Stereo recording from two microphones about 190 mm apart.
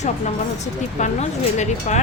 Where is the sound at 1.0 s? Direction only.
40° left (ahead or behind).